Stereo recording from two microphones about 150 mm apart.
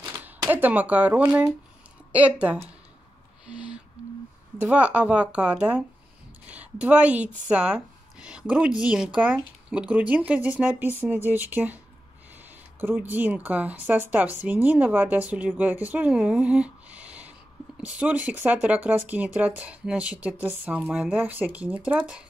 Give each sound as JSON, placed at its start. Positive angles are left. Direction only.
{"t": 0.2, "sound": "speech", "side_deg": -10}
{"t": 3.4, "sound": "a sound", "side_deg": -5}
{"t": 4.6, "sound": "a woman's voice", "side_deg": -10}
{"t": 12.8, "sound": "speech", "side_deg": -15}